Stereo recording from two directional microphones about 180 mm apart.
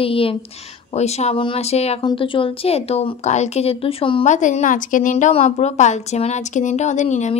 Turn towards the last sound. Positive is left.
turn(degrees=40)  # may be behind; listen again after turning